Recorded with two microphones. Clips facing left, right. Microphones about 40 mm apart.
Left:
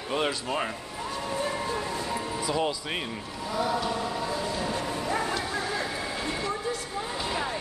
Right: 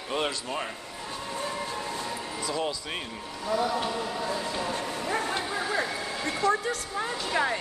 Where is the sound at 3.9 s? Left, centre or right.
Centre.